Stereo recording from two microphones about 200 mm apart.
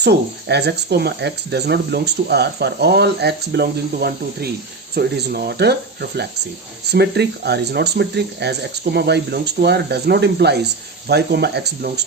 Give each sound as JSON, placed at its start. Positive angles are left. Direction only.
{"t": 0.0, "sound": "speech", "side_deg": -55}